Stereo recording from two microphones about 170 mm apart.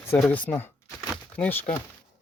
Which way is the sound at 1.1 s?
10° left (ahead or behind).